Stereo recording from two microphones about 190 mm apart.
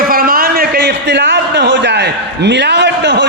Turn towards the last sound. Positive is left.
turn(degrees=-65)  # may be behind; listen again after turning